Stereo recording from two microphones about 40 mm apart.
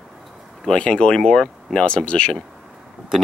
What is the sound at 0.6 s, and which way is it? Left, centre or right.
Speech, left.